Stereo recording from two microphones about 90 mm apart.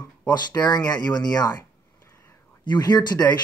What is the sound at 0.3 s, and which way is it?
Speech, 50° left (ahead or behind).